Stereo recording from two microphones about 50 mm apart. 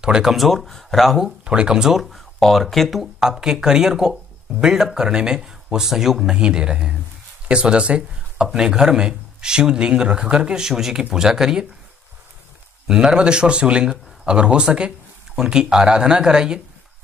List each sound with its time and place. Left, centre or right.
0.0 s speech: centre
0.4 s speech: centre
1.4 s speech: centre
2.1 s speech: centre
3.2 s speech: centre
6.3 s speech: centre
12.8 s speech: centre